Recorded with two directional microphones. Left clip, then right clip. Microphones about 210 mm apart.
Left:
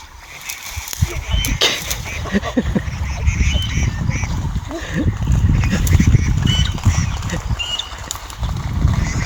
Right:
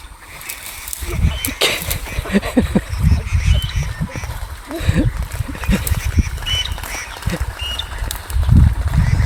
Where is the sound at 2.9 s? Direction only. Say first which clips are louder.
Right 1 dB; 45° right (ahead or behind).